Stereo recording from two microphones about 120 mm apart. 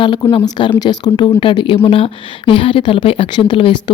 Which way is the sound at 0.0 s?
40° left (ahead or behind).